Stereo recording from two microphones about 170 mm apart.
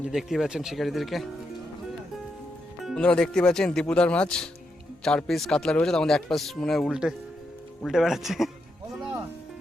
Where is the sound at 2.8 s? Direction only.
5° left (ahead or behind).